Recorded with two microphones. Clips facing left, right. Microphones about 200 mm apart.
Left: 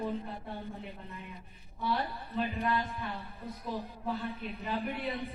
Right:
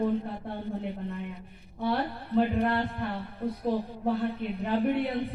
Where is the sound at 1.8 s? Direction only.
60° right (ahead or behind).